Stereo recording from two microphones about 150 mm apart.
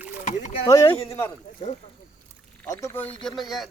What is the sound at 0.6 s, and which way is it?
Speech, 20° left (ahead or behind).